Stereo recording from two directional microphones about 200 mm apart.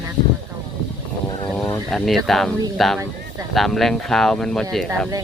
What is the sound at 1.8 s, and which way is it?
Speech, centre (ahead or behind).